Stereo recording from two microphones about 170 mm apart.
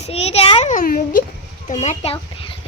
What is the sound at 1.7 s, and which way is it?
Speech, 45° left (ahead or behind).